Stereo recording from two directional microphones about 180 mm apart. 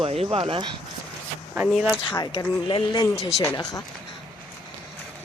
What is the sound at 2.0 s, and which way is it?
Speech, 25° left (ahead or behind).